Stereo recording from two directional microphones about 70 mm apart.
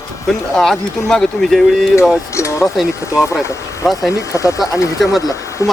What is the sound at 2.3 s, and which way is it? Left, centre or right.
Speech, left.